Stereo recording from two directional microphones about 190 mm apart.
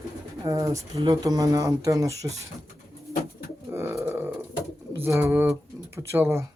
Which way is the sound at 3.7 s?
10° right (ahead or behind).